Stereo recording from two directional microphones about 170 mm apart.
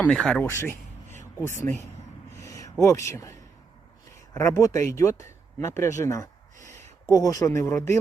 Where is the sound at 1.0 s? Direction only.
45° right (ahead or behind).